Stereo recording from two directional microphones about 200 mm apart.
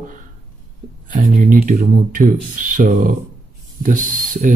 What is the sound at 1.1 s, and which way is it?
Speech, 40° right (ahead or behind).